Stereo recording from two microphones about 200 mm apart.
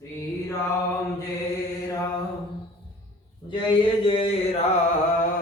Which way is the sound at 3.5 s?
25° left (ahead or behind).